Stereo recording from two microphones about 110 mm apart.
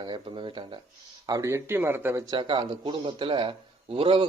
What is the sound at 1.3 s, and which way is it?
Speech, 25° right (ahead or behind).